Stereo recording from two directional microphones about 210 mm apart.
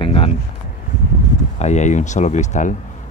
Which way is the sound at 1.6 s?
35° left (ahead or behind).